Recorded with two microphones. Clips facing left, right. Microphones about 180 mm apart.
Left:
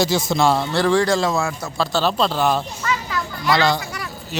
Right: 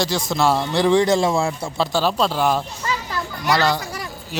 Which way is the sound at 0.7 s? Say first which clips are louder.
Right 1 dB; 20° right (ahead or behind).